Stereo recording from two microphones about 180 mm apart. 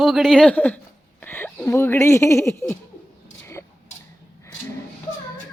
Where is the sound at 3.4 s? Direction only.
15° left (ahead or behind).